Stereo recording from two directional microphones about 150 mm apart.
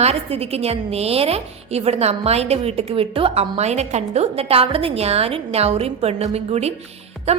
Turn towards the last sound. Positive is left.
turn(degrees=-45)  # may be behind; listen again after turning